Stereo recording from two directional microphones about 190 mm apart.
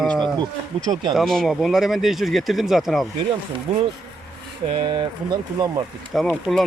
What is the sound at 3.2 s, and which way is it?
Speech, 25° right (ahead or behind).